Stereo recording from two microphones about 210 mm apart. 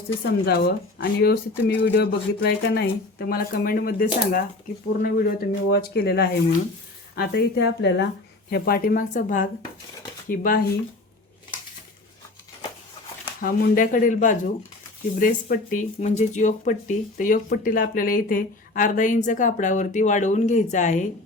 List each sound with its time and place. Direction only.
0.3 s speech: 50° left (ahead or behind)
13.4 s speech: 45° left (ahead or behind)